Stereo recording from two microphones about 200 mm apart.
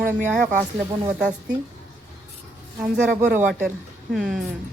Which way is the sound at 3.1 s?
40° right (ahead or behind).